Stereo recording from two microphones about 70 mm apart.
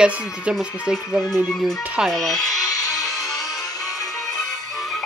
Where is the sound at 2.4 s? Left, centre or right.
Left.